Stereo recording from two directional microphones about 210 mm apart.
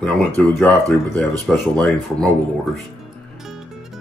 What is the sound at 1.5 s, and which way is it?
Speech, 5° left (ahead or behind).